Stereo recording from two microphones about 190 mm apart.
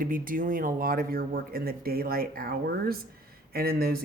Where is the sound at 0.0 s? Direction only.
45° right (ahead or behind).